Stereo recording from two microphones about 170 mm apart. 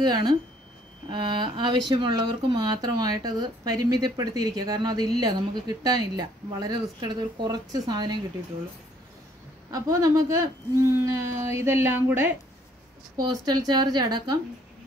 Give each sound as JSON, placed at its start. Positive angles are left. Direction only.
{"t": 0.0, "sound": "speech", "side_deg": -25}
{"t": 9.7, "sound": "speech", "side_deg": -20}